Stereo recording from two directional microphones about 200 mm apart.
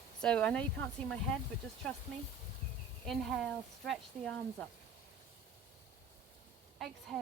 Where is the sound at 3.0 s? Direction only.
Centre (ahead or behind).